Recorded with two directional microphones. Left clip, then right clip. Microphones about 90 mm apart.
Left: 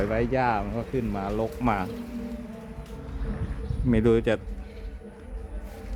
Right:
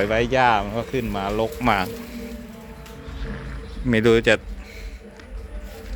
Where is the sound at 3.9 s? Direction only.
Centre (ahead or behind).